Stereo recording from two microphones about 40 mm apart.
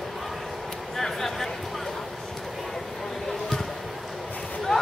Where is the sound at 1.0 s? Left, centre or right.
Centre.